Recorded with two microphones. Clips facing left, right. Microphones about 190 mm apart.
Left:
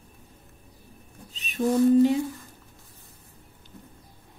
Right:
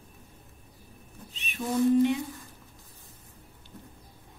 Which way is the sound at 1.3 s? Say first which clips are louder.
Left 6 dB; 40° left (ahead or behind).